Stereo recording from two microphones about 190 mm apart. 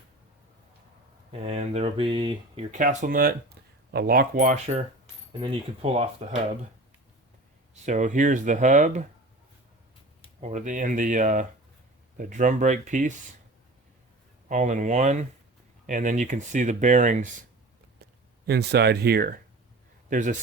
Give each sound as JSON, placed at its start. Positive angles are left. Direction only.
{"t": 1.3, "sound": "speech", "side_deg": -35}
{"t": 2.7, "sound": "speech", "side_deg": -45}
{"t": 7.9, "sound": "speech", "side_deg": -40}
{"t": 10.4, "sound": "speech", "side_deg": -40}
{"t": 14.4, "sound": "speech", "side_deg": -40}
{"t": 18.0, "sound": "speech", "side_deg": -60}
{"t": 20.1, "sound": "a man's voice", "side_deg": -40}